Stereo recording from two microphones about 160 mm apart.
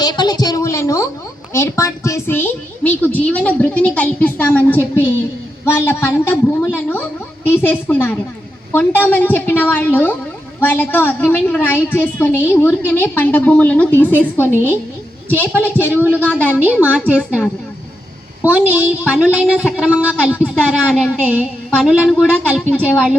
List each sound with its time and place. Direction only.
0.0 s a woman's voice: 25° left (ahead or behind)
15.9 s a woman's voice: 10° right (ahead or behind)
16.2 s a woman's voice: 10° left (ahead or behind)
16.5 s a woman's voice: 10° right (ahead or behind)
18.4 s a woman's voice: 10° right (ahead or behind)
20.3 s a woman's voice: 5° left (ahead or behind)